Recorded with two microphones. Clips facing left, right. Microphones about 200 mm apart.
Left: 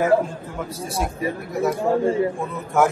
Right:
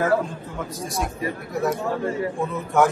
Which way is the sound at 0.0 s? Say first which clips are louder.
Left 3 dB; 25° left (ahead or behind).